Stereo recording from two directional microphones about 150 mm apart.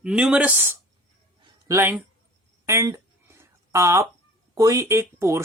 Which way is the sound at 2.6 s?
20° right (ahead or behind).